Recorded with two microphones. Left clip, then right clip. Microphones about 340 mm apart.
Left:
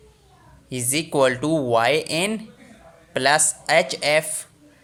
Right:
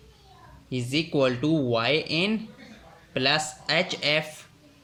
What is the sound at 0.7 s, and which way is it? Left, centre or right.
Speech, centre.